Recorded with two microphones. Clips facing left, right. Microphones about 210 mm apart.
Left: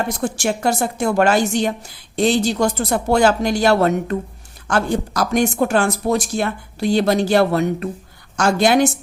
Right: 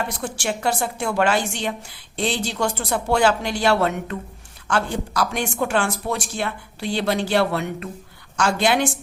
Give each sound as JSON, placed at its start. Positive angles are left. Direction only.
{"t": 0.0, "sound": "speech", "side_deg": 45}